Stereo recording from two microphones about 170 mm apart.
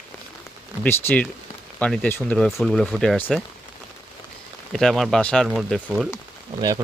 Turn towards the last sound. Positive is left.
turn(degrees=-20)  # may be behind; listen again after turning